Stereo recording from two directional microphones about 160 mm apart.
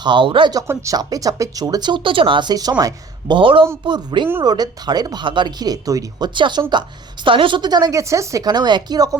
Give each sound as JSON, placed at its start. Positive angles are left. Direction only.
{"t": 0.0, "sound": "speech", "side_deg": -30}
{"t": 0.7, "sound": "speech", "side_deg": -20}